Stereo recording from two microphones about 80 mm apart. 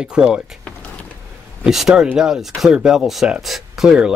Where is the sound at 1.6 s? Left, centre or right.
Centre.